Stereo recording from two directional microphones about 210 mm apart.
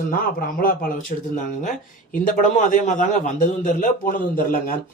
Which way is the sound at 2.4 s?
35° left (ahead or behind).